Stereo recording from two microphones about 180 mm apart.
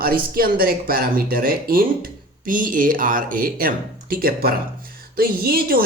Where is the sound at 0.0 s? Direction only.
55° right (ahead or behind).